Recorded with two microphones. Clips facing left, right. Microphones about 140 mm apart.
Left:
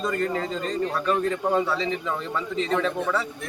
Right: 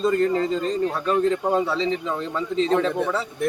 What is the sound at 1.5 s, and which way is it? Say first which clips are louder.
A man's voice: right 2 dB; 25° right (ahead or behind).